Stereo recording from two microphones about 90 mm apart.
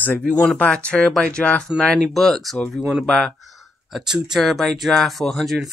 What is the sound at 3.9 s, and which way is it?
Speech, 5° right (ahead or behind).